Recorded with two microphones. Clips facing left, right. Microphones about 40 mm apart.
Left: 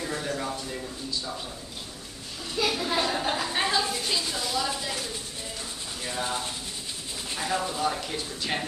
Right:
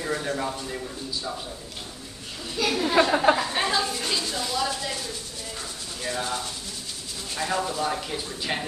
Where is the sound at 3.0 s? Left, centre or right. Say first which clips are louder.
Right 9 dB; right.